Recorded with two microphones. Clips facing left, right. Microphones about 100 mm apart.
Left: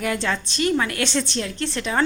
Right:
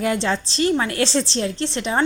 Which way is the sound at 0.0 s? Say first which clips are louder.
Right 3 dB; 30° right (ahead or behind).